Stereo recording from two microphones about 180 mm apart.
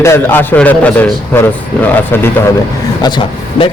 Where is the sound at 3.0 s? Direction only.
30° left (ahead or behind).